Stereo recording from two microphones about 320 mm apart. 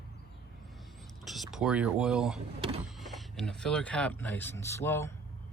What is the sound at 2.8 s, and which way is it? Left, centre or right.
Speech, centre.